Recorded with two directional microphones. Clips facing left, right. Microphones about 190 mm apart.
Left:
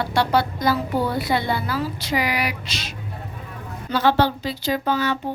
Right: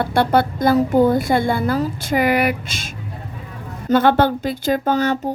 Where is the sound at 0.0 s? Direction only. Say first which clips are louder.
Right 4 dB; 55° right (ahead or behind).